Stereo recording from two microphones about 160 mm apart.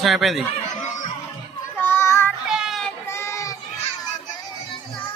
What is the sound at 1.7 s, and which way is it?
Child singing, 15° left (ahead or behind).